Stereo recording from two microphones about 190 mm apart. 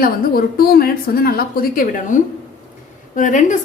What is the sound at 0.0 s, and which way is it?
A woman's voice, 50° left (ahead or behind).